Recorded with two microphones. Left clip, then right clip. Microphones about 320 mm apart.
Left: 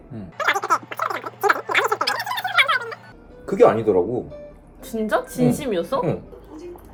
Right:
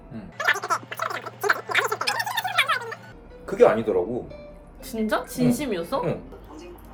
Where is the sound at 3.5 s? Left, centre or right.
Left.